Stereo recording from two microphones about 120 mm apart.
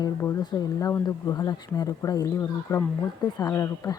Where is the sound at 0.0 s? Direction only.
25° left (ahead or behind).